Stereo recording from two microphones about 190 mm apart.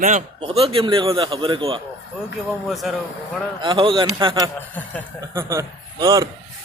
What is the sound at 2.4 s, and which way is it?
Speech, centre (ahead or behind).